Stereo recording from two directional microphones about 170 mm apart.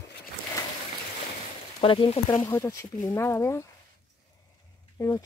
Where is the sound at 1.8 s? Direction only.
30° left (ahead or behind).